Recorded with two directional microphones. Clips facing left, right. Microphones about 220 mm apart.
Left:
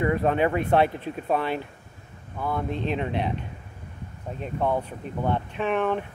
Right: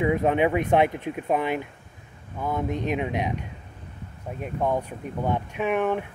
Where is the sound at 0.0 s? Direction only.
15° right (ahead or behind).